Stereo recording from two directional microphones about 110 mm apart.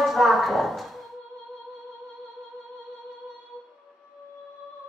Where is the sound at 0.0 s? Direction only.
Centre (ahead or behind).